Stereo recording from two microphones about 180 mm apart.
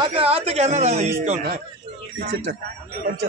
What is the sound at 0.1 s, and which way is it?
A woman's voice, 30° right (ahead or behind).